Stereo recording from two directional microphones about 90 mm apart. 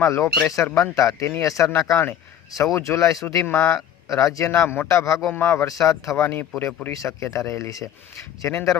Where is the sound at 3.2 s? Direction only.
20° left (ahead or behind).